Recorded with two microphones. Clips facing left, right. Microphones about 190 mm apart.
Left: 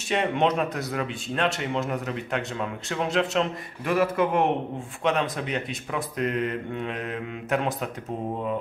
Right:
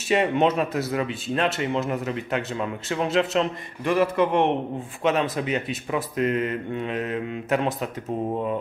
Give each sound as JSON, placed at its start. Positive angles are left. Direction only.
{"t": 0.1, "sound": "speech", "side_deg": -5}